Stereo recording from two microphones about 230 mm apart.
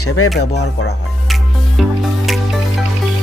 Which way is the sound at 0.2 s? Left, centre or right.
Left.